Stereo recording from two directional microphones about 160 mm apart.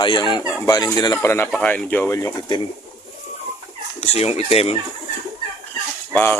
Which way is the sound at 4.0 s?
40° left (ahead or behind).